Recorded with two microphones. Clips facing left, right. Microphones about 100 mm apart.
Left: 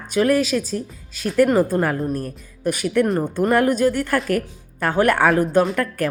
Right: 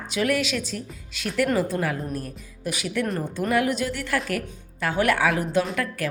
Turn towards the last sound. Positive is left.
turn(degrees=45)  # may be behind; listen again after turning